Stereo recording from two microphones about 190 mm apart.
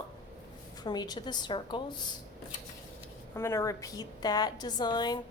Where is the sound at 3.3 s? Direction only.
15° left (ahead or behind).